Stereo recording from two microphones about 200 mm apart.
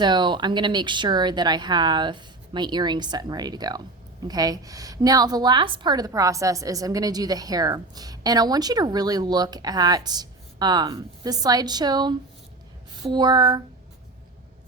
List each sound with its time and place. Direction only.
0.0 s a woman's voice: 20° right (ahead or behind)